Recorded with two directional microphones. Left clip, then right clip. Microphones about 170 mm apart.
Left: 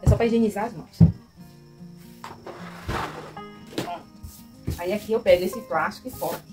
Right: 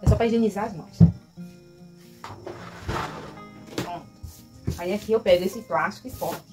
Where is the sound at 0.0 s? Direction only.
5° right (ahead or behind).